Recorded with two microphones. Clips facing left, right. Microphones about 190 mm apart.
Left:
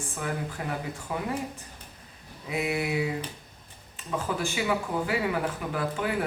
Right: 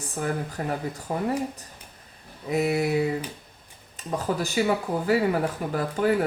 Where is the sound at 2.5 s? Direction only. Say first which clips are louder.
Right 5 dB; 40° right (ahead or behind).